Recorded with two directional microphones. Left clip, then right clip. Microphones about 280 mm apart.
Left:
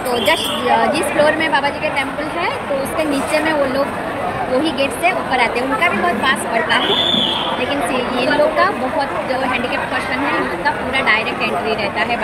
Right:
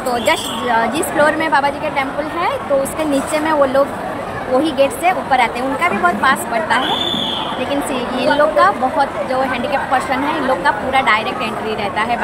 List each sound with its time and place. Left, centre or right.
0.3 s a woman's voice: centre
3.3 s a woman's voice: centre
8.3 s a woman's voice: centre
10.6 s a woman's voice: centre